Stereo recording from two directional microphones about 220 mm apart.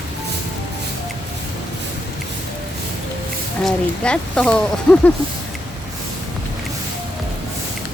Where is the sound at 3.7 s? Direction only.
5° left (ahead or behind).